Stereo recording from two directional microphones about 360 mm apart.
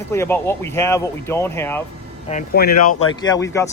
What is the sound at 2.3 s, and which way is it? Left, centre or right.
Speech, left.